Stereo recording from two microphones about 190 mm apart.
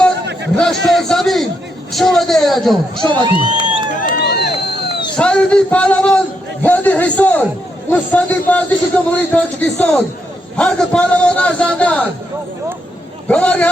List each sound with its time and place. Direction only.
0.5 s a sound: centre (ahead or behind)
1.9 s speech: centre (ahead or behind)
3.1 s crowd: 25° right (ahead or behind)
4.2 s a sound: 60° left (ahead or behind)
5.1 s a man's voice: 5° left (ahead or behind)
13.2 s a man's voice: 5° left (ahead or behind)